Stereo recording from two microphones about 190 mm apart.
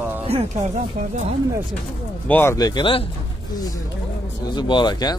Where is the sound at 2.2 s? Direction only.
10° left (ahead or behind); by 3.1 s 30° left (ahead or behind).